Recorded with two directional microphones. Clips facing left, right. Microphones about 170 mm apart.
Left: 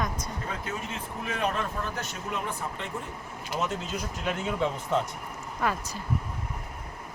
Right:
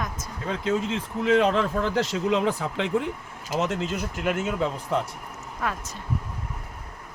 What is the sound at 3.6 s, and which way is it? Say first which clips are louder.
Speech: right 4 dB; 80° right.